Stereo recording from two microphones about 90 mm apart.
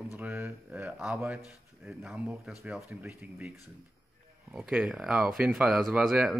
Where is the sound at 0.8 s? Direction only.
10° right (ahead or behind).